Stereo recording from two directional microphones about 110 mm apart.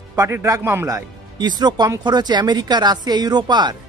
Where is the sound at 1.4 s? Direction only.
40° right (ahead or behind).